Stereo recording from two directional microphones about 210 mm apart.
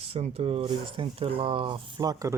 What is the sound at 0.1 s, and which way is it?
Speech, 30° right (ahead or behind).